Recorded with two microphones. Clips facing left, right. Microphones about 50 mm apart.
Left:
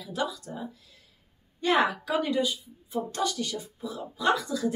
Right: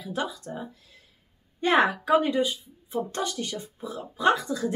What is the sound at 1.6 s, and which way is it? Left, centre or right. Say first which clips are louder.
A woman's voice: right 2 dB; right.